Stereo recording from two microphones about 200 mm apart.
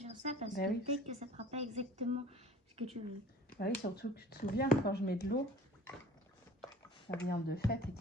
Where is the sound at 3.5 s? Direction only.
55° left (ahead or behind).